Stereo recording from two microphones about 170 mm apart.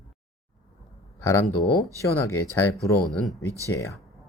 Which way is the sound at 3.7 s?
15° left (ahead or behind).